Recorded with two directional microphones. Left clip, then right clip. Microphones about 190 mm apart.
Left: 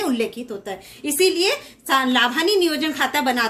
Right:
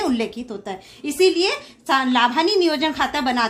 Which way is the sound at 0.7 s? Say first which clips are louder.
Left 1 dB; 45° right (ahead or behind).